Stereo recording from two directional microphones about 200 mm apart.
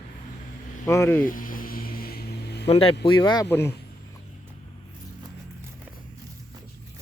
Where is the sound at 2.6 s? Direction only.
30° left (ahead or behind); by 3.8 s 10° left (ahead or behind).